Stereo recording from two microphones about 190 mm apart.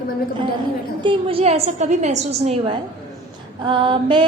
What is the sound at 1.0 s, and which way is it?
A woman's voice, 30° right (ahead or behind).